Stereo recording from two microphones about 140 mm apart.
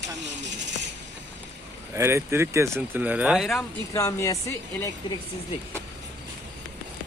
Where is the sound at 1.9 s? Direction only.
20° right (ahead or behind); by 3.6 s centre (ahead or behind).